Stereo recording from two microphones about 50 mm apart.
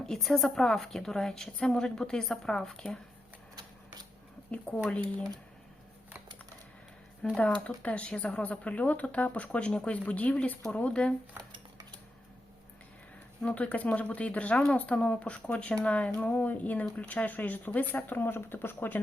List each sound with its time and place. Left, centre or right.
0.0 s a woman's voice: centre
4.5 s speech: left
7.3 s speech: left
13.4 s speech: left
18.3 s speech: left